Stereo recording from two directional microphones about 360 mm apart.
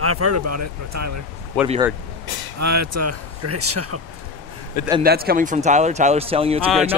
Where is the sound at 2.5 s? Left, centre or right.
Right.